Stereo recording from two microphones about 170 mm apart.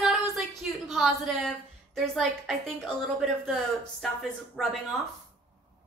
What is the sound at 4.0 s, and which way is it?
Speech, centre (ahead or behind).